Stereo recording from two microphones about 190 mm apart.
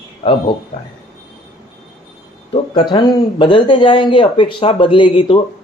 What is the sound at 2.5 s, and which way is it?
Speech, 25° left (ahead or behind).